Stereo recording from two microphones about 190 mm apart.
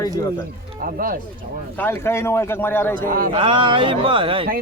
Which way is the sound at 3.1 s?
50° right (ahead or behind).